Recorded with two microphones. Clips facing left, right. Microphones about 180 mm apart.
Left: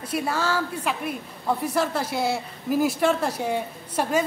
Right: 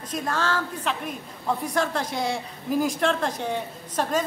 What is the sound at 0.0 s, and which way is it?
A woman's voice, 10° left (ahead or behind).